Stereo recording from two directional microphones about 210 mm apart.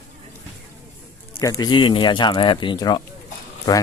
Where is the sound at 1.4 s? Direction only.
15° left (ahead or behind).